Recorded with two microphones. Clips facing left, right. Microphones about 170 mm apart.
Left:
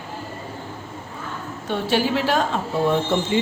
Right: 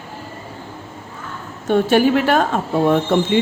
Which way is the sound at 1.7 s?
50° right (ahead or behind).